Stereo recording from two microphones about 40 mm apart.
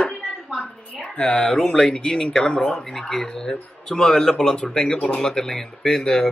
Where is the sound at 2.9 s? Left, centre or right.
Centre.